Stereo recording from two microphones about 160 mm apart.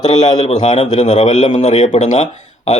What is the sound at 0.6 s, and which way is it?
Speech, 35° left (ahead or behind).